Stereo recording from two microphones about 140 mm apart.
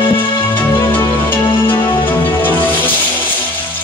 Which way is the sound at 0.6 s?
15° left (ahead or behind).